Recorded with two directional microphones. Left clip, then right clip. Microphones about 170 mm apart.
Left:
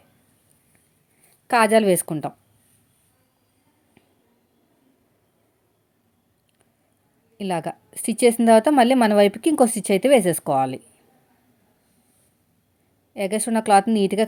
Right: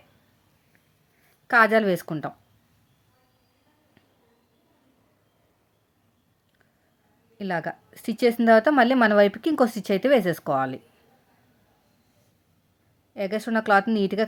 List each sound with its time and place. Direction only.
1.5 s a woman's voice: 15° left (ahead or behind)
7.3 s a woman's voice: 15° left (ahead or behind)
13.1 s a woman's voice: 15° left (ahead or behind)